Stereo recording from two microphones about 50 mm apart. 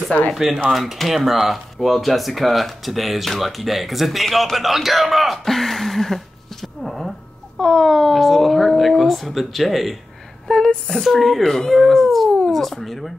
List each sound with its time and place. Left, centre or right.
0.1 s speech: left
0.7 s speech: centre
10.5 s speech: centre